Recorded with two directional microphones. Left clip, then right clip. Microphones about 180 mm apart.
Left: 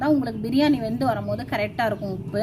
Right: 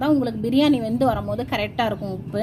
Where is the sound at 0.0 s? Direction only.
25° right (ahead or behind).